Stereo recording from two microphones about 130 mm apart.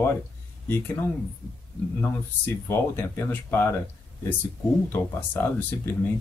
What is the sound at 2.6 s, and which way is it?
Speech, 15° left (ahead or behind).